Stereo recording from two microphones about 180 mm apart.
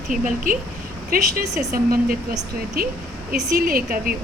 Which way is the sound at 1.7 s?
55° right (ahead or behind).